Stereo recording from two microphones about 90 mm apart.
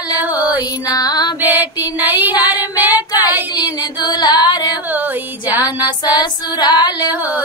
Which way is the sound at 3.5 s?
50° left (ahead or behind).